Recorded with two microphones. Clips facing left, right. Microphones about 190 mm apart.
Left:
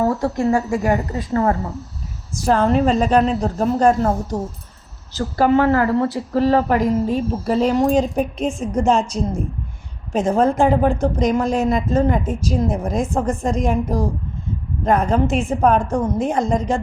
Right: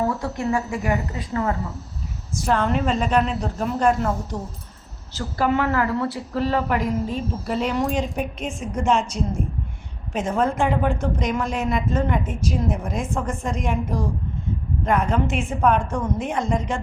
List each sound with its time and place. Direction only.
0.1 s speech: 40° left (ahead or behind)